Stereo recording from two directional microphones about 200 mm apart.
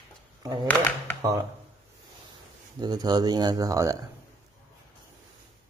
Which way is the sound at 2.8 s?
20° right (ahead or behind).